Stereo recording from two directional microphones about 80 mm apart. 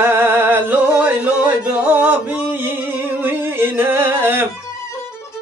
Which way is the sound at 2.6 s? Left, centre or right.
Right.